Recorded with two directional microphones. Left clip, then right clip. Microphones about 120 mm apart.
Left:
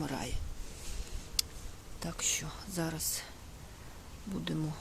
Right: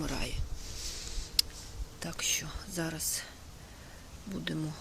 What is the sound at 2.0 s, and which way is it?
Speech, 20° left (ahead or behind).